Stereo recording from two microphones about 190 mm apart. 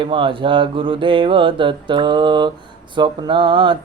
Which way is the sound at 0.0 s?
25° right (ahead or behind).